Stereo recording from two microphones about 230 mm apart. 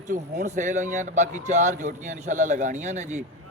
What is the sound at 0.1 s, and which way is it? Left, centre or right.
Speech, right.